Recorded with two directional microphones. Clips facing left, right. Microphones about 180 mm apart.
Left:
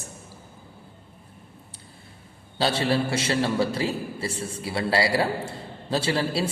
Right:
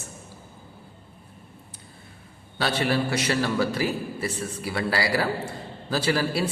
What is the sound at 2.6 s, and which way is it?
A man's voice, 30° left (ahead or behind).